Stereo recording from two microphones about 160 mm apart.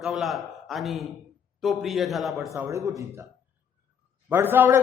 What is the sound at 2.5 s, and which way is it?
Speech, 20° right (ahead or behind).